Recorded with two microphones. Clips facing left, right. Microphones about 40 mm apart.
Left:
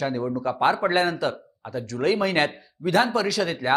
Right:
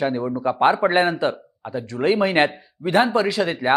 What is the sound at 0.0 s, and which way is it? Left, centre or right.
Speech, right.